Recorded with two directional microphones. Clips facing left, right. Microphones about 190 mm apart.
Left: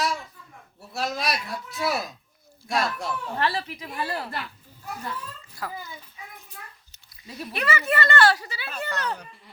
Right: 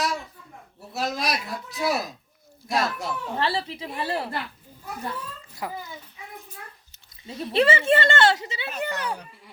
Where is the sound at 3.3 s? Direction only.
30° right (ahead or behind).